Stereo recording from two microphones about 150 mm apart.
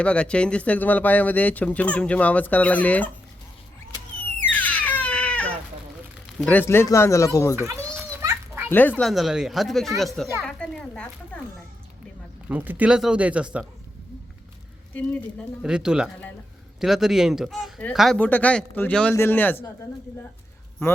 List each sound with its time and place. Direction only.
0.0 s speech: 10° left (ahead or behind)
4.5 s baby cry: 10° left (ahead or behind)
6.4 s speech: 10° left (ahead or behind)
7.7 s children playing: 20° right (ahead or behind)
8.7 s speech: 10° left (ahead or behind)
9.0 s speech: centre (ahead or behind)
12.5 s speech: 10° right (ahead or behind)
14.9 s speech: 10° left (ahead or behind)
15.6 s speech: 5° right (ahead or behind); by 19.5 s 15° left (ahead or behind)